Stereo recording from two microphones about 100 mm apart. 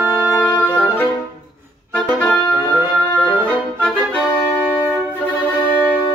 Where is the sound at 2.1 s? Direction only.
15° left (ahead or behind).